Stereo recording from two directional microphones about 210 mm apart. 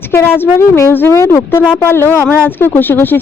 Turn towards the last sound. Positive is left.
turn(degrees=10)  # may be behind; listen again after turning